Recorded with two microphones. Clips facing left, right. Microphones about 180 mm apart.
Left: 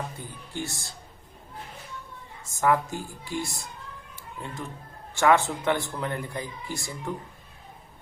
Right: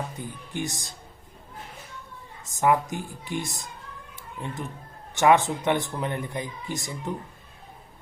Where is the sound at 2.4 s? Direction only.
20° right (ahead or behind).